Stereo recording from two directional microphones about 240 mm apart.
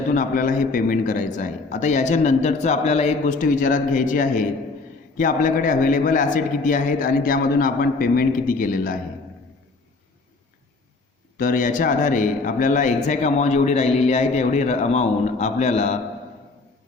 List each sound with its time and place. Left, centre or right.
0.1 s a man's voice: left
11.3 s a man's voice: left